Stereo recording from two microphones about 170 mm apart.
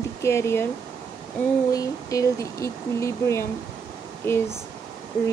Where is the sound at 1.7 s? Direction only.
20° left (ahead or behind).